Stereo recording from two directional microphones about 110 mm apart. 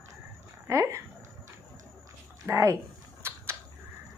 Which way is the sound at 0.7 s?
25° right (ahead or behind).